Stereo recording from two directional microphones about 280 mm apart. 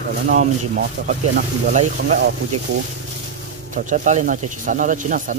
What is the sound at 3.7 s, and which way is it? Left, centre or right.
Speech, right.